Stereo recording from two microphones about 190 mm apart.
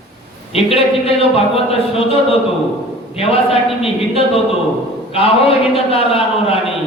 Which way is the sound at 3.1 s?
30° left (ahead or behind).